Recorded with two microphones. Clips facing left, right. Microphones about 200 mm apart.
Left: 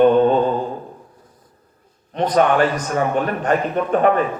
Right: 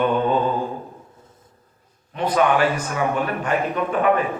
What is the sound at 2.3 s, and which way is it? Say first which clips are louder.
A man's voice: left 2 dB; 40° left (ahead or behind).